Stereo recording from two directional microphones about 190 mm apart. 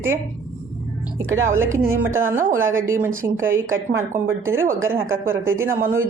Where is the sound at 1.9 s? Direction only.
15° right (ahead or behind).